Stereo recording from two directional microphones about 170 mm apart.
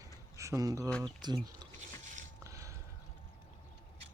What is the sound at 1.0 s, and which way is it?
Speech, 25° right (ahead or behind).